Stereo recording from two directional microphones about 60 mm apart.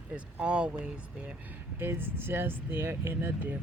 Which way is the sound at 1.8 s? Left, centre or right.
Right.